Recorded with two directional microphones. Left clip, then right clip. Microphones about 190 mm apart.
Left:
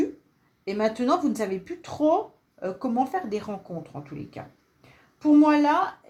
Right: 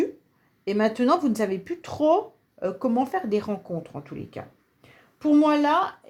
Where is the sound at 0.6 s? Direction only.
40° right (ahead or behind).